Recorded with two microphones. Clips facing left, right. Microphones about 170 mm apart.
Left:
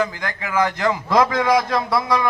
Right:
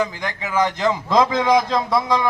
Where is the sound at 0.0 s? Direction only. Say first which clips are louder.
Even; 20° right (ahead or behind).